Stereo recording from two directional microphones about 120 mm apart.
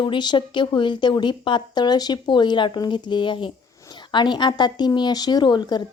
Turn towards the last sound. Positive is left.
turn(degrees=40)  # may be behind; listen again after turning